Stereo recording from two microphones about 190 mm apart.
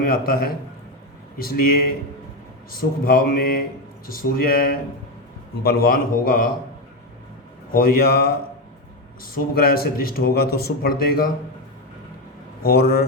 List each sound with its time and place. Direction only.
0.1 s speech: 50° left (ahead or behind)
7.7 s speech: 50° left (ahead or behind)
12.6 s a man's voice: 55° left (ahead or behind)